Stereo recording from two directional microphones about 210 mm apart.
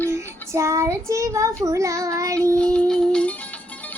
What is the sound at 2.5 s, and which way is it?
Music, 5° left (ahead or behind).